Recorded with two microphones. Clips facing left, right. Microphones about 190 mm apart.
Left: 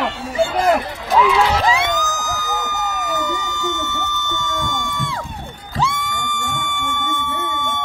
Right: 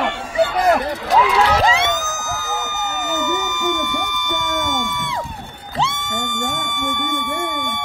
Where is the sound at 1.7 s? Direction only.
25° right (ahead or behind).